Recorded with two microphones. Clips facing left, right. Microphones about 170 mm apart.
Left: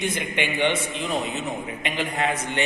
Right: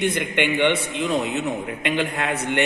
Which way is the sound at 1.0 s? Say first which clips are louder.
Right 4 dB; 75° right (ahead or behind).